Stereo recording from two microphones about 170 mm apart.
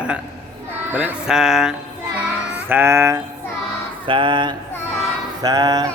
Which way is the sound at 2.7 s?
15° right (ahead or behind).